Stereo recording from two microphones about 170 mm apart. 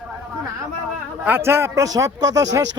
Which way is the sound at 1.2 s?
10° right (ahead or behind).